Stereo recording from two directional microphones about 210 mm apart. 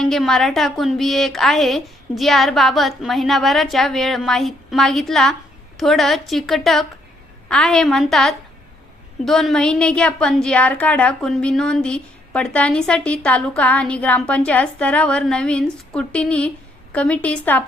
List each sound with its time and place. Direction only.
0.0 s a woman's voice: centre (ahead or behind)